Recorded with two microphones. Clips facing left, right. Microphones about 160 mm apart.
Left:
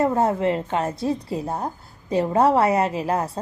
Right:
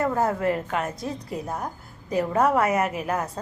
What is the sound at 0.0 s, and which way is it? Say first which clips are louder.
A woman's voice: left 3 dB; 25° left (ahead or behind).